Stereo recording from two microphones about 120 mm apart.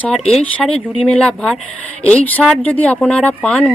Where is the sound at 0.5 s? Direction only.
10° left (ahead or behind).